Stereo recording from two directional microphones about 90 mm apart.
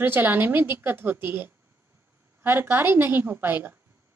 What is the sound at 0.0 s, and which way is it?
A woman's voice, 25° right (ahead or behind).